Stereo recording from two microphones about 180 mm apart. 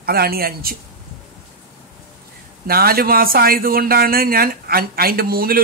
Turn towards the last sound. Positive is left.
turn(degrees=-55)  # may be behind; listen again after turning